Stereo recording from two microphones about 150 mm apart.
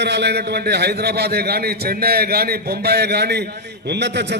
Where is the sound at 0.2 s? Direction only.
90° right.